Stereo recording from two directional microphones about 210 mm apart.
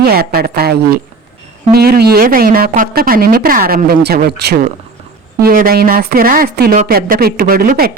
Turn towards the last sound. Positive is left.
turn(degrees=-45)  # may be behind; listen again after turning